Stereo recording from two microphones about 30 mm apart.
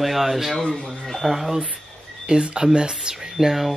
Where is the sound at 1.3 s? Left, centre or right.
Centre.